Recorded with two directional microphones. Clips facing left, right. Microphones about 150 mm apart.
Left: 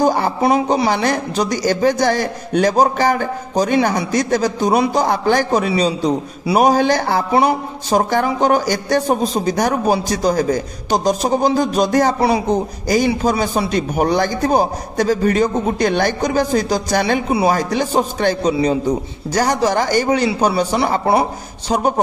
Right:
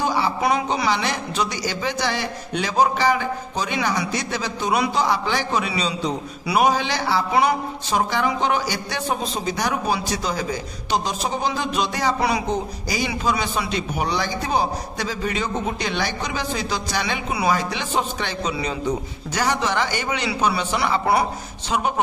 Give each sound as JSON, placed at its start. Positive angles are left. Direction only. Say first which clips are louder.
{"t": 0.0, "sound": "speech", "louder": "left 6 dB", "side_deg": 50}
{"t": 0.4, "sound": "speech", "louder": "left 8 dB", "side_deg": 30}
{"t": 0.8, "sound": "a man's voice", "louder": "left 6 dB", "side_deg": 45}
{"t": 12.2, "sound": "a man's voice", "louder": "left 6 dB", "side_deg": 30}
{"t": 12.8, "sound": "a man's voice", "louder": "left 10 dB", "side_deg": 45}